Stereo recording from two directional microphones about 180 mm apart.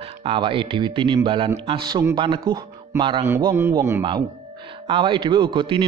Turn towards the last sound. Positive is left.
turn(degrees=-30)  # may be behind; listen again after turning